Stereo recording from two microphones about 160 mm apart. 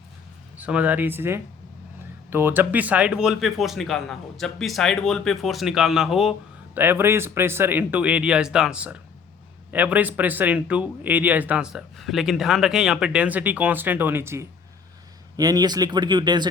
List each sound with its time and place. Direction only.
0.5 s speech: 10° right (ahead or behind)
6.7 s speech: 10° right (ahead or behind)